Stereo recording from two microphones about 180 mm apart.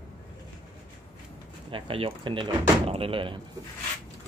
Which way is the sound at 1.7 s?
30° right (ahead or behind).